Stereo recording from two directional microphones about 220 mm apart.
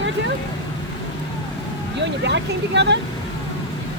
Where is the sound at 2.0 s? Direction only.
50° right (ahead or behind).